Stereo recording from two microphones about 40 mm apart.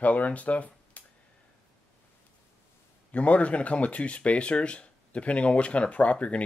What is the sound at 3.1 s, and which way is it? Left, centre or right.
Speech, left.